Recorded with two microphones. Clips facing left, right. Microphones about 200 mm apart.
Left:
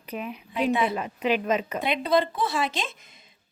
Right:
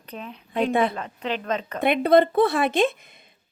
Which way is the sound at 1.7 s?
55° right (ahead or behind).